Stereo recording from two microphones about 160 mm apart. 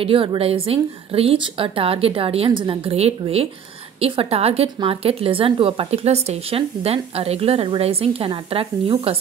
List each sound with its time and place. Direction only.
0.0 s a woman's voice: 35° right (ahead or behind)